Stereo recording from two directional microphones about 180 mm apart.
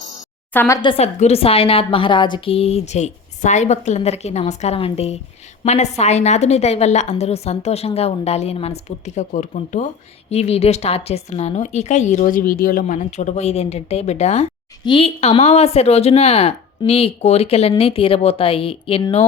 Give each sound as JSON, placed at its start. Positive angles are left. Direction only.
{"t": 0.5, "sound": "a woman's voice", "side_deg": 10}
{"t": 0.8, "sound": "a woman's voice", "side_deg": 30}